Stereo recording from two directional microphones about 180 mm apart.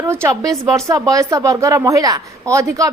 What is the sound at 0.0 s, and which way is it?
A woman's voice, 15° right (ahead or behind).